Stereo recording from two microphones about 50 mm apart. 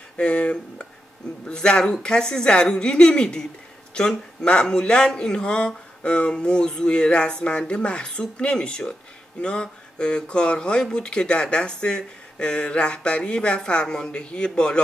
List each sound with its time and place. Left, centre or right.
0.2 s speech: left